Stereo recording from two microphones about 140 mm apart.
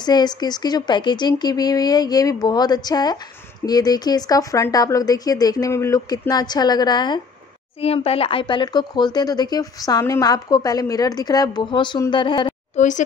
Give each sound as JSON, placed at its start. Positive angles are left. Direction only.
{"t": 0.0, "sound": "speech", "side_deg": 30}
{"t": 7.8, "sound": "a woman's voice", "side_deg": 45}
{"t": 12.7, "sound": "speech", "side_deg": 60}